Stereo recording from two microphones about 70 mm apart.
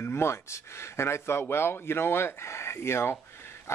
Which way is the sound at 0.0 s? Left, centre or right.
Left.